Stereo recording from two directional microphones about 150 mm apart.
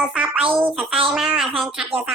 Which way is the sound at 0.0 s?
5° right (ahead or behind).